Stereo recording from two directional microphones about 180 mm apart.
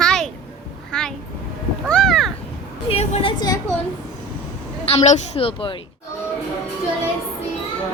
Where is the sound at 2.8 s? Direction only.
35° left (ahead or behind).